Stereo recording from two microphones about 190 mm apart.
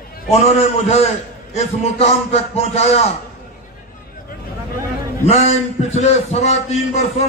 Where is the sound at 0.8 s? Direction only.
35° left (ahead or behind).